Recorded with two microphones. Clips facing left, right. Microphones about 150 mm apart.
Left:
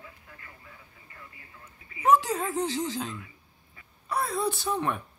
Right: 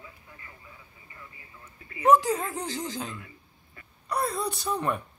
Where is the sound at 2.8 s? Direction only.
Centre (ahead or behind).